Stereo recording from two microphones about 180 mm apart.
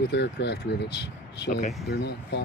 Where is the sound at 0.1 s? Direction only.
70° left (ahead or behind).